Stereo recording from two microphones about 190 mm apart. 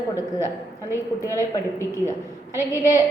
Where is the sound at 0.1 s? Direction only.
15° left (ahead or behind).